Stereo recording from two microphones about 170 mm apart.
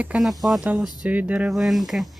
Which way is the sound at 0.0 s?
5° right (ahead or behind).